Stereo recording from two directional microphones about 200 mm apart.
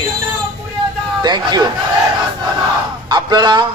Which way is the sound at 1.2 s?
20° right (ahead or behind).